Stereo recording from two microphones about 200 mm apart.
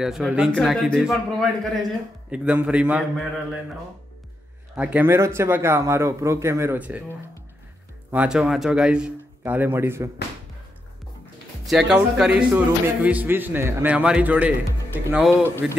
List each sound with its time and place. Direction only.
0.0 s a man's voice: centre (ahead or behind)
4.7 s speech: 5° right (ahead or behind)
8.1 s a man's voice: 5° right (ahead or behind)
11.6 s speech: centre (ahead or behind)